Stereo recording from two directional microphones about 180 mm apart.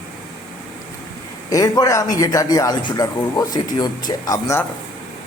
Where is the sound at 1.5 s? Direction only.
20° left (ahead or behind).